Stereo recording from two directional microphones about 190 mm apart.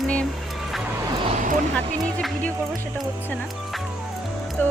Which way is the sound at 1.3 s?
45° right (ahead or behind).